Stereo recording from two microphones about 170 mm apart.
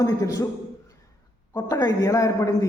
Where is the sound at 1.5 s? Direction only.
25° left (ahead or behind).